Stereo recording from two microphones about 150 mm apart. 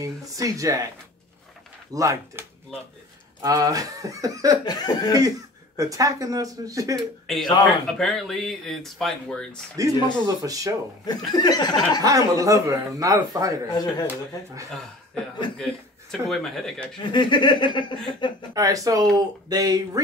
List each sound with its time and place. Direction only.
0.0 s speech: 20° right (ahead or behind)
2.0 s speech: 20° right (ahead or behind)
3.4 s speech: 25° right (ahead or behind)
4.6 s a sound: 25° left (ahead or behind)
5.8 s speech: 20° right (ahead or behind)
7.0 s speech: centre (ahead or behind)
9.8 s speech: 25° right (ahead or behind)
11.1 s a sound: 25° left (ahead or behind)
12.0 s speech: 25° right (ahead or behind)
13.7 s a sound: 25° left (ahead or behind)
15.5 s speech: centre (ahead or behind)
17.0 s speech: 30° left (ahead or behind)
18.5 s speech: 25° right (ahead or behind)